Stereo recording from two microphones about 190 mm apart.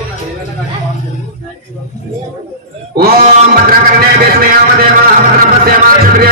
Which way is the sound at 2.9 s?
55° right (ahead or behind).